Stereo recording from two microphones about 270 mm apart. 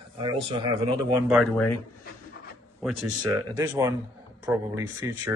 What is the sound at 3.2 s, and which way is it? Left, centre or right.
A man's voice, centre.